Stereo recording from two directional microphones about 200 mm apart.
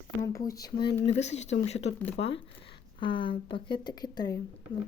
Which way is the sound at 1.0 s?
35° left (ahead or behind).